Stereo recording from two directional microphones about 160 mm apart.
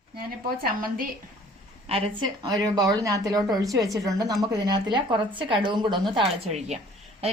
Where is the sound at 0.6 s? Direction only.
65° right (ahead or behind).